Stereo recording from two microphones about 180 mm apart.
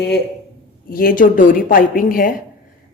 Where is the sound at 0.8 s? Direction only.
55° left (ahead or behind).